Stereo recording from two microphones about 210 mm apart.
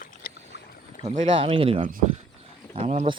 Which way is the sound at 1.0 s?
25° right (ahead or behind).